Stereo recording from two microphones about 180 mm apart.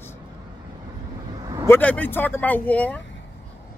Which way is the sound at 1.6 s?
10° left (ahead or behind).